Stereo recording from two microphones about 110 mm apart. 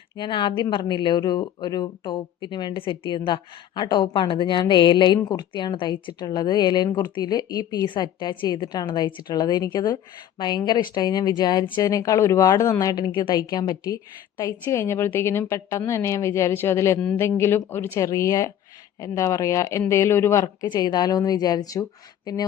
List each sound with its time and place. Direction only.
0.2 s a woman's voice: 45° left (ahead or behind)
11.8 s a woman's voice: 30° left (ahead or behind)
20.7 s a woman's voice: 40° left (ahead or behind)